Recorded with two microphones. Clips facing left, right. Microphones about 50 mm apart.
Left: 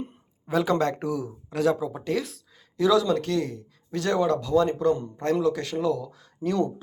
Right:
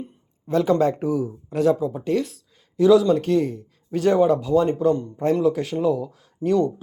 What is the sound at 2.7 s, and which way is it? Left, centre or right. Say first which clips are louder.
Speech: right 6 dB; left.